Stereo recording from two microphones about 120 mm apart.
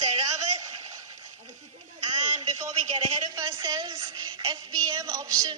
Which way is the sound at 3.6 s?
30° right (ahead or behind).